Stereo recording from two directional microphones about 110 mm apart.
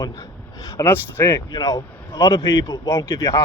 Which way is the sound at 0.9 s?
20° left (ahead or behind).